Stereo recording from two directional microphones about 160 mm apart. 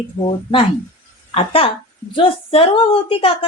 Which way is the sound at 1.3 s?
35° left (ahead or behind).